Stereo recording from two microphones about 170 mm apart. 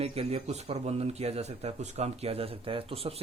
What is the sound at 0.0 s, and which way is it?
Speech, 35° right (ahead or behind).